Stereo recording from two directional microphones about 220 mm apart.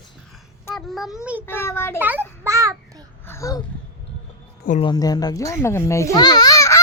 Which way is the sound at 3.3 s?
15° left (ahead or behind).